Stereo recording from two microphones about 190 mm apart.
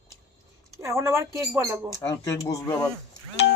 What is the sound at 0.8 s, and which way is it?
Speech, 15° right (ahead or behind).